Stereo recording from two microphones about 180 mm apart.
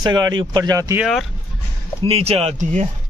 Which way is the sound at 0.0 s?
25° right (ahead or behind).